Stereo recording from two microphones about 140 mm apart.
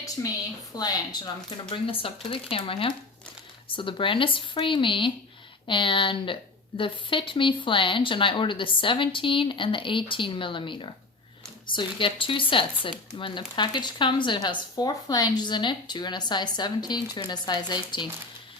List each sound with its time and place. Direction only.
0.2 s a woman's voice: 20° left (ahead or behind)